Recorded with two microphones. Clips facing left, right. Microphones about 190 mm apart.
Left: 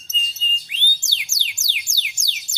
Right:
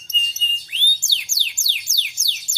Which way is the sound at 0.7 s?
15° left (ahead or behind).